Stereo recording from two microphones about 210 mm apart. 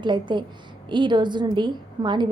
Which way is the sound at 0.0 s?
20° right (ahead or behind).